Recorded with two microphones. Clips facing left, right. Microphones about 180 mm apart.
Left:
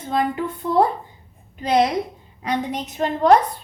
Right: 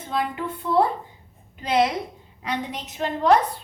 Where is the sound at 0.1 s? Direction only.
45° left (ahead or behind).